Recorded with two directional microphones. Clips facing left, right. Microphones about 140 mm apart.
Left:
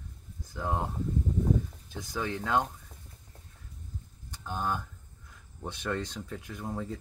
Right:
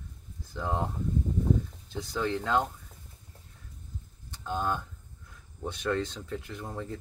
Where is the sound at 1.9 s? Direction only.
15° left (ahead or behind).